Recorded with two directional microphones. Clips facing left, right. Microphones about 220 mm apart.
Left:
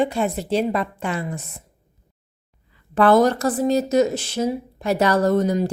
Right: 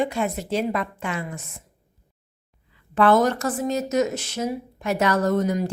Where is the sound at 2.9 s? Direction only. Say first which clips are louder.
Left 3 dB; 35° left (ahead or behind).